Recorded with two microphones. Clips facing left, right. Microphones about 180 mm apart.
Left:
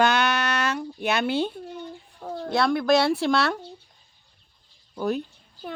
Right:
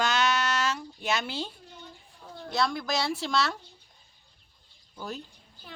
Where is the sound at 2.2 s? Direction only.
60° left (ahead or behind).